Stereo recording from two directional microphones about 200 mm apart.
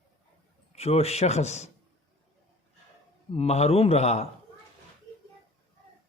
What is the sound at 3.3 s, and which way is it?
Speech, 30° left (ahead or behind).